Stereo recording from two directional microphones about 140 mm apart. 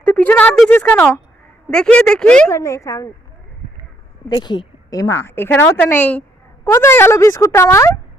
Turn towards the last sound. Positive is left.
turn(degrees=20)  # may be behind; listen again after turning